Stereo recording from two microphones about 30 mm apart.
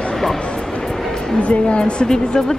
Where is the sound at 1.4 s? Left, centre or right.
Left.